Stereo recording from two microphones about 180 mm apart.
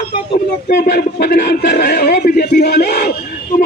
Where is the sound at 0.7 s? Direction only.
60° left (ahead or behind).